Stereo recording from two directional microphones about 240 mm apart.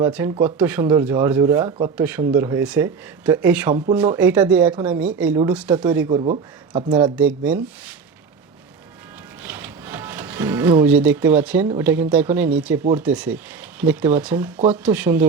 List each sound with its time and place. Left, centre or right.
0.0 s speech: centre
6.1 s speech: right
7.2 s speech: centre
9.4 s music: centre
11.8 s speech: centre